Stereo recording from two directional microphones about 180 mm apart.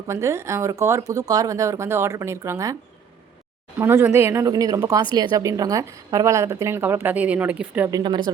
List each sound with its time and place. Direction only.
0.1 s a woman's voice: 15° right (ahead or behind)
3.8 s a woman's voice: 10° right (ahead or behind)
7.9 s speech: 20° right (ahead or behind)